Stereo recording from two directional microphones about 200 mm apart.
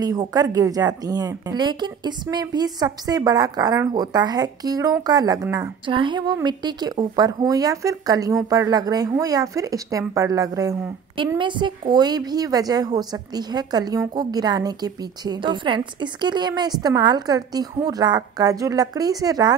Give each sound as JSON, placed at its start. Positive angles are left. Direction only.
{"t": 0.0, "sound": "speech", "side_deg": -20}